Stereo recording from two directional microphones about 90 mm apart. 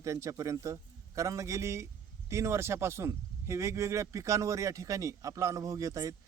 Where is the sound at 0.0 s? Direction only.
35° right (ahead or behind).